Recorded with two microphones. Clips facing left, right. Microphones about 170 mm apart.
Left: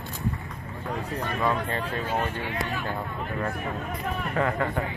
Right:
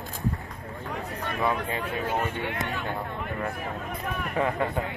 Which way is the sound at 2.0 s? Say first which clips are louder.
Even; 60° right (ahead or behind).